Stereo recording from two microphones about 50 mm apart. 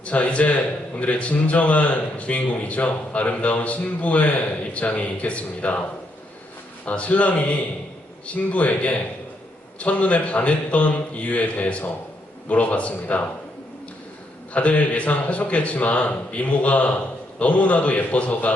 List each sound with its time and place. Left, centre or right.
0.0 s a man's voice: left
6.8 s a man's voice: left
14.5 s a man's voice: left